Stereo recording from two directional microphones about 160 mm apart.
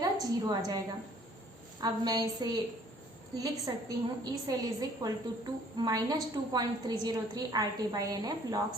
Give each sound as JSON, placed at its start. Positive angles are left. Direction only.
{"t": 0.0, "sound": "a woman's voice", "side_deg": -25}
{"t": 1.8, "sound": "a woman's voice", "side_deg": -25}